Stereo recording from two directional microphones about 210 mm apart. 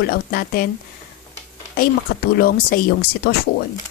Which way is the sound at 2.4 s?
45° left (ahead or behind).